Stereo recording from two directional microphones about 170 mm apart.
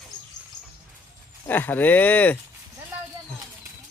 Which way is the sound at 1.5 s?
10° left (ahead or behind).